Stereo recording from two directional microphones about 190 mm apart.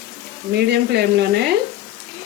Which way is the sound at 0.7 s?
60° right (ahead or behind).